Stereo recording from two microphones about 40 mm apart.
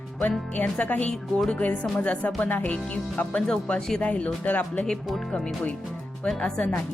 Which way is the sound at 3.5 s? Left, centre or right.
Left.